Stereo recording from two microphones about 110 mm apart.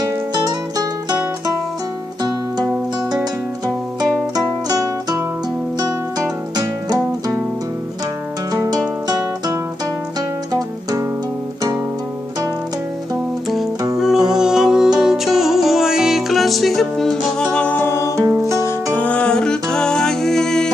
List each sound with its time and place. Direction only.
0.0 s music: 35° right (ahead or behind)
4.4 s music: 35° right (ahead or behind)
6.1 s music: 35° right (ahead or behind)
8.7 s music: 35° right (ahead or behind)
13.9 s music: 5° right (ahead or behind); by 18.9 s 25° left (ahead or behind)
18.9 s music: 10° left (ahead or behind)